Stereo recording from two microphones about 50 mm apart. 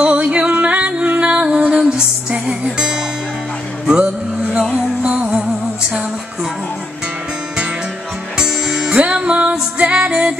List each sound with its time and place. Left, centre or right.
0.0 s music: right
8.4 s music: centre
9.0 s music: right